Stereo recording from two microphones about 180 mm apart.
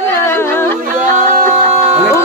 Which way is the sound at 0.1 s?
15° left (ahead or behind).